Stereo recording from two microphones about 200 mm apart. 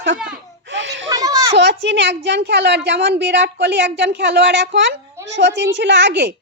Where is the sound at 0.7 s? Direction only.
65° right (ahead or behind).